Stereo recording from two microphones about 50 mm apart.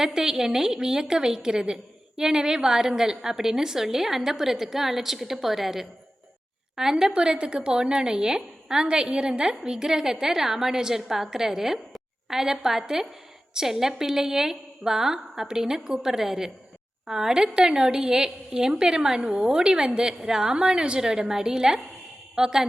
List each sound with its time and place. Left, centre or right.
0.0 s a woman's voice: centre